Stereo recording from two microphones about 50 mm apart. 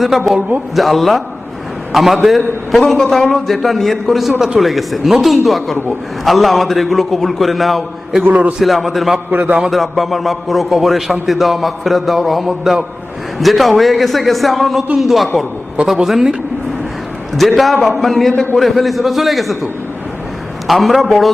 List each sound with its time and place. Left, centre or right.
0.3 s a man's voice: right
0.8 s a man's voice: centre
8.3 s a man's voice: right
8.5 s a man's voice: centre
9.3 s a man's voice: right
9.6 s a man's voice: centre
17.6 s a man's voice: centre
20.7 s a man's voice: centre